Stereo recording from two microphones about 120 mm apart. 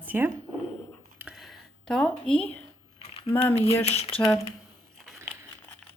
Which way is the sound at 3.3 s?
15° left (ahead or behind).